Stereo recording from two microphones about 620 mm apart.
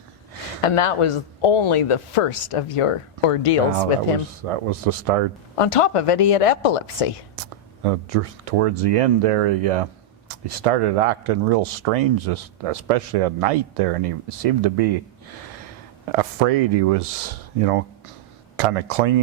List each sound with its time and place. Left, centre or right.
0.6 s a woman's voice: left
4.2 s speech: right
5.5 s a woman's voice: left
7.3 s speech: right
16.1 s speech: right